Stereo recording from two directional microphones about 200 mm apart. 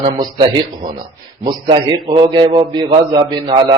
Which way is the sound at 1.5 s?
20° right (ahead or behind).